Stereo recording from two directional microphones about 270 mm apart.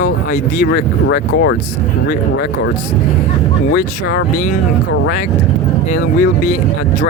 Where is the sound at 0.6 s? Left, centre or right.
Left.